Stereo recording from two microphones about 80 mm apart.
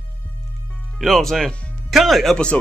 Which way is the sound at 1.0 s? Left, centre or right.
Centre.